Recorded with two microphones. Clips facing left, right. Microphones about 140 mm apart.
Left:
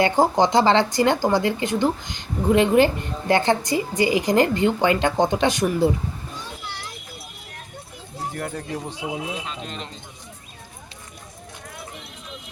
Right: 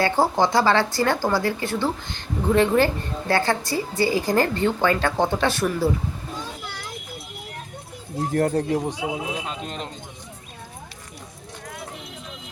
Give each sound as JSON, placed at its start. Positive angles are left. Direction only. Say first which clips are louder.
{"t": 0.0, "sound": "speech", "louder": "left 2 dB", "side_deg": 20}
{"t": 8.3, "sound": "speech", "louder": "right 10 dB", "side_deg": -40}
{"t": 8.7, "sound": "speech", "louder": "right 5 dB", "side_deg": -15}
{"t": 9.6, "sound": "speech", "louder": "right 2 dB", "side_deg": -50}